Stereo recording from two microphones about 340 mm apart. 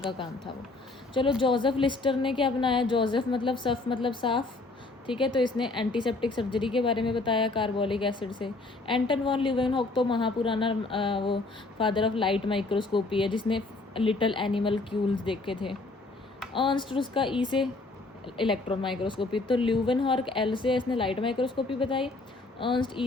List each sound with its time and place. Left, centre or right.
0.0 s a woman's voice: centre
1.4 s a woman's voice: centre